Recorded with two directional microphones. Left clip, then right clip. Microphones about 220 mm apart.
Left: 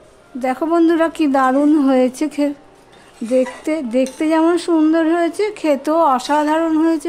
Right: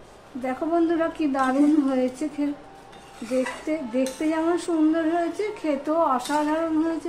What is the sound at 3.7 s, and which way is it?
Speech, 55° left (ahead or behind).